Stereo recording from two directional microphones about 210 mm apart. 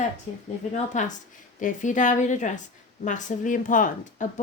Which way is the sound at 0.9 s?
35° left (ahead or behind).